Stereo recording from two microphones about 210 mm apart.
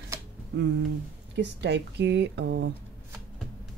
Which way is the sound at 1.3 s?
55° right (ahead or behind).